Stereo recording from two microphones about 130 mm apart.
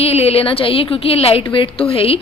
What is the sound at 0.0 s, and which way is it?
A woman's voice, 50° left (ahead or behind).